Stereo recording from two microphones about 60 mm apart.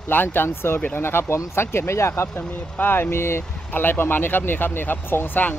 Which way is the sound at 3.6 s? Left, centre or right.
Left.